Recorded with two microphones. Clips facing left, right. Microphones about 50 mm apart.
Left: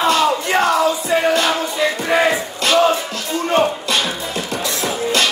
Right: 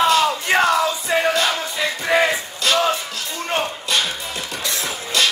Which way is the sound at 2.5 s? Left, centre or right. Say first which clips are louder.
Left 4 dB; left.